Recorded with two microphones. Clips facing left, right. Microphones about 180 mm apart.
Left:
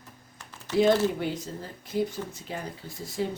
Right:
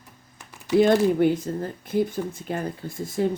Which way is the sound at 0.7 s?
10° right (ahead or behind).